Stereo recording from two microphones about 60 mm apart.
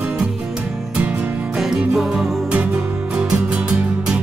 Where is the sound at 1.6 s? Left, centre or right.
Centre.